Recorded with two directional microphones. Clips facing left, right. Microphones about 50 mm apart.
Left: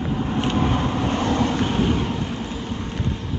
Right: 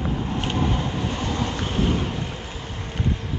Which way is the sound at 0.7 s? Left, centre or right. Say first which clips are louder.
Left 4 dB; left.